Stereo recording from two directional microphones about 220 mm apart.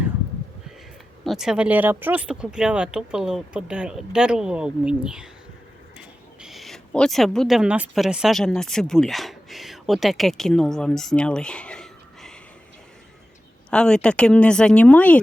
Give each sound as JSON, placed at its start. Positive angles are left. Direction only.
{"t": 1.2, "sound": "speech", "side_deg": 0}
{"t": 6.4, "sound": "speech", "side_deg": 0}
{"t": 13.7, "sound": "speech", "side_deg": 5}